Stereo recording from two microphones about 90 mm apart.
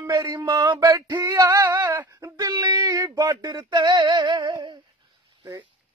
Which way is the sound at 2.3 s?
45° right (ahead or behind).